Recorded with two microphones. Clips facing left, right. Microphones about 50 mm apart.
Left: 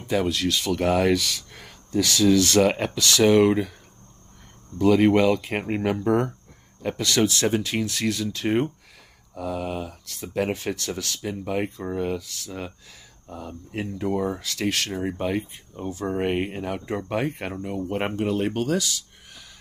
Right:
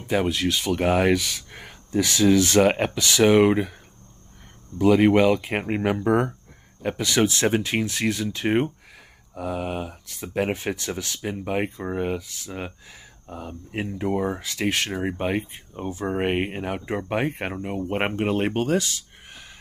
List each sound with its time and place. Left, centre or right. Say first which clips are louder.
0.0 s speech: right 1 dB; right
4.7 s speech: right 1 dB; centre; by 19.5 s right